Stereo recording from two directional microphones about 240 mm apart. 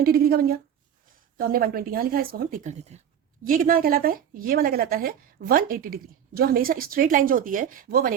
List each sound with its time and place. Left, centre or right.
0.0 s speech: right